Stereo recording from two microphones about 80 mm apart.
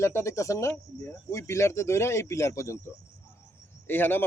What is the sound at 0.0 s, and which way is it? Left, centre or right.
Speech, left.